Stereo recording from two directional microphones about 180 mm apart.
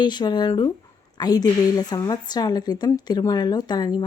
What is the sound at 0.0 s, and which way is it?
A woman's voice, 25° left (ahead or behind).